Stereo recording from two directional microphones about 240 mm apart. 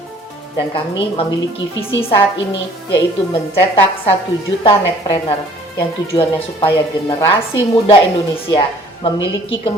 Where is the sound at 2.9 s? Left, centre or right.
Left.